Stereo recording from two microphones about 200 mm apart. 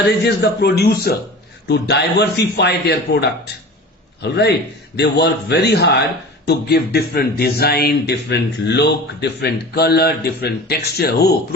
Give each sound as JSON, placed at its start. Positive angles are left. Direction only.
{"t": 0.3, "sound": "a man's voice", "side_deg": 55}